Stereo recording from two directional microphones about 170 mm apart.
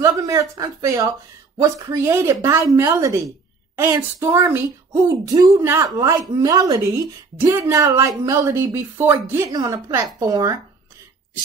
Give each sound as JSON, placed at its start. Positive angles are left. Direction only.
{"t": 0.0, "sound": "a woman's voice", "side_deg": -20}